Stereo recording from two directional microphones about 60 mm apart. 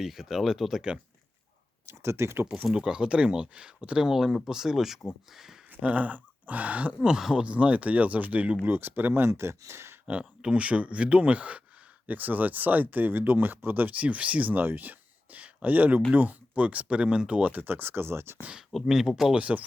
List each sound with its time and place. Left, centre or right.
0.0 s speech: centre
1.9 s speech: right
2.7 s speech: centre
5.8 s speech: right
7.2 s speech: centre
7.4 s speech: right
9.3 s speech: right
10.1 s speech: centre; by 18.4 s right
18.7 s speech: centre
19.4 s speech: right